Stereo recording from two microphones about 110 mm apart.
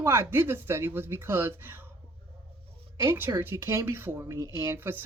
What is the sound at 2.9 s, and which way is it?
Speech, 20° right (ahead or behind).